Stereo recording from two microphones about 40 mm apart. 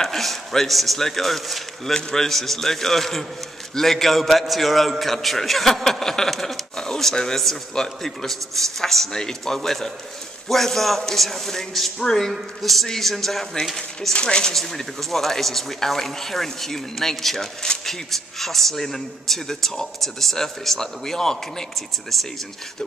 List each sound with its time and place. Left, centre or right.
0.0 s a man's voice: centre
2.0 s speech: left
2.2 s a man's voice: centre
14.2 s a man's voice: centre